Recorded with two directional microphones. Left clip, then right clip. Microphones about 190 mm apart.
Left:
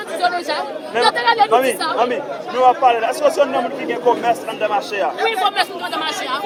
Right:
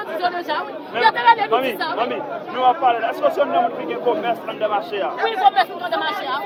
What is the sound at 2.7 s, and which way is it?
A man's voice, 40° left (ahead or behind).